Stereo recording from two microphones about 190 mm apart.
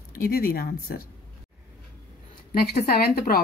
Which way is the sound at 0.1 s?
50° left (ahead or behind).